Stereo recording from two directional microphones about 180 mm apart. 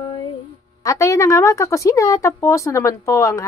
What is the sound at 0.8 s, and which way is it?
A woman's voice, 15° left (ahead or behind).